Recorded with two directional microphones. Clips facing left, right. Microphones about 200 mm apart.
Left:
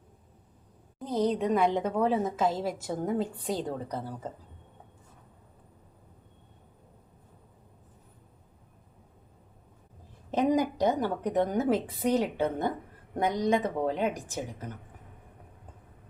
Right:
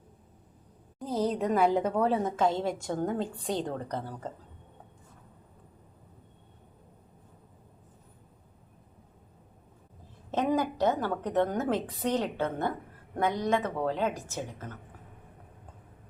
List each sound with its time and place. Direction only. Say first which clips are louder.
0.9 s a woman's voice: left 2 dB; centre (ahead or behind)
10.3 s a woman's voice: left 2 dB; 15° left (ahead or behind)